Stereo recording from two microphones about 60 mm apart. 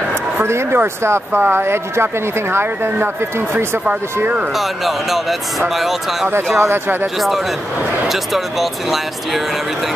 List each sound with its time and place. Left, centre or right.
0.4 s speech: right
4.6 s speech: centre
6.3 s speech: right
7.2 s speech: centre